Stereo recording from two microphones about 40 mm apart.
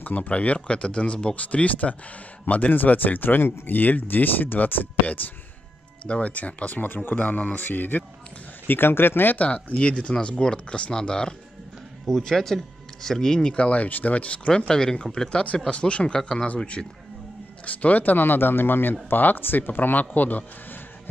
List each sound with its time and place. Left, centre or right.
0.0 s speech: left
0.3 s speech: left
6.0 s speech: left
6.8 s speech: left
8.6 s a man's voice: left
9.4 s speech: left; by 13.6 s centre
13.6 s speech: left
14.7 s speech: centre
15.7 s speech: left
17.6 s a man's voice: left